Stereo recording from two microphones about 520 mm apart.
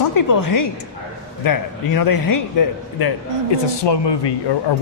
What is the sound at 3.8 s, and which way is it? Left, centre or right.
Speech, left.